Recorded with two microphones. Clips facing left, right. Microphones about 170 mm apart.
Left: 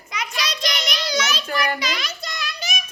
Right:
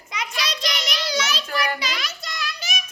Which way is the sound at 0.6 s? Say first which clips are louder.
Left 1 dB; centre (ahead or behind).